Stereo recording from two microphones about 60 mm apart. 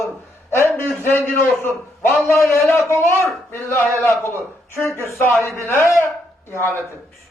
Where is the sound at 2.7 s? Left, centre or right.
Left.